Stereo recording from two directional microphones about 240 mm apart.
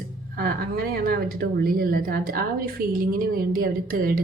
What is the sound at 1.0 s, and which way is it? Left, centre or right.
Speech, right.